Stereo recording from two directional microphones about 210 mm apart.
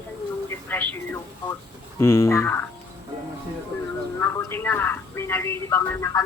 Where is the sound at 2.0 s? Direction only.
10° left (ahead or behind).